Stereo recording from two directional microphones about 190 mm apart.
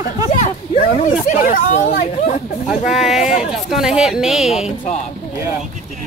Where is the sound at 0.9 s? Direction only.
40° left (ahead or behind).